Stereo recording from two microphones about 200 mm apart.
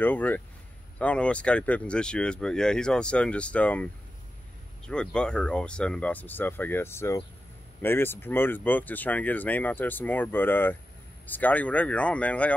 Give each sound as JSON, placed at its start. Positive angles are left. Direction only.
{"t": 0.0, "sound": "speech", "side_deg": 10}